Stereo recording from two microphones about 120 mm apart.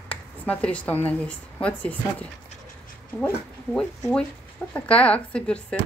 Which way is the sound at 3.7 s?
5° left (ahead or behind).